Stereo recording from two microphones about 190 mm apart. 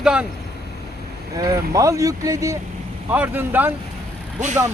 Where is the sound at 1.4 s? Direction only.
20° right (ahead or behind).